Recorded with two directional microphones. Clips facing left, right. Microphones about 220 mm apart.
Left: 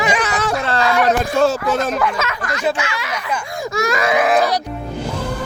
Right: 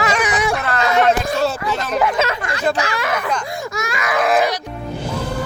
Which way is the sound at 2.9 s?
55° right (ahead or behind).